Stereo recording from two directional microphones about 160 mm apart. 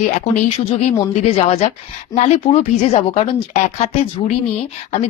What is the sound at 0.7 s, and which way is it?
A woman's voice, 40° left (ahead or behind).